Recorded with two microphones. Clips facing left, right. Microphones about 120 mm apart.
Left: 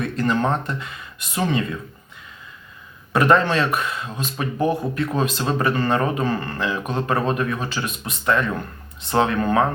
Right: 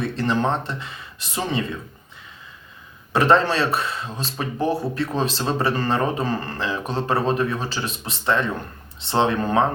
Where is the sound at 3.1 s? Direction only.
30° right (ahead or behind).